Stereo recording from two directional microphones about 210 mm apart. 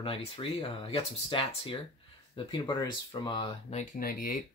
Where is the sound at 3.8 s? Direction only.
45° left (ahead or behind).